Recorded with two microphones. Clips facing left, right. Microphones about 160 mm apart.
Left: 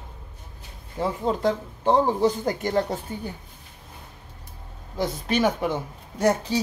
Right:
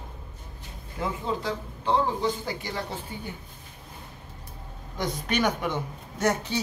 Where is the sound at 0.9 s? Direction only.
30° left (ahead or behind).